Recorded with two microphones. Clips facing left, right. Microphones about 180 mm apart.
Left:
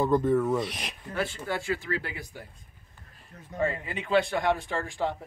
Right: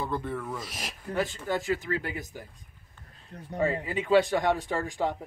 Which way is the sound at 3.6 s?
5° right (ahead or behind).